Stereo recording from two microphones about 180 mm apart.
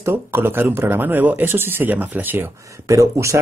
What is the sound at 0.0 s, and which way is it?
Speech, 15° right (ahead or behind).